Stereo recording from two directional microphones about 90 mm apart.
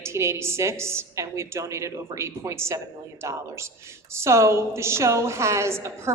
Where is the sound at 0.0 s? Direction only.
30° right (ahead or behind).